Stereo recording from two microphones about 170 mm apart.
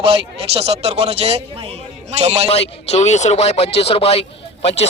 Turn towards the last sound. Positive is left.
turn(degrees=35)  # may be behind; listen again after turning